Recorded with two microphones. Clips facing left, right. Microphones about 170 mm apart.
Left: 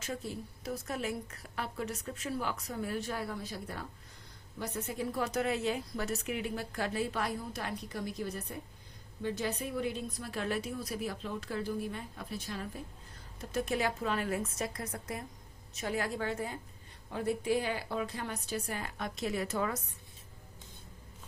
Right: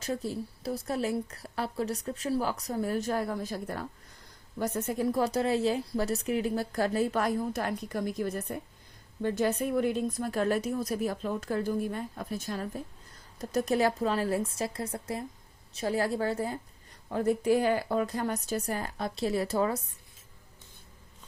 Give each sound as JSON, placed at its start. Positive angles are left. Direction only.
{"t": 0.0, "sound": "a woman's voice", "side_deg": -35}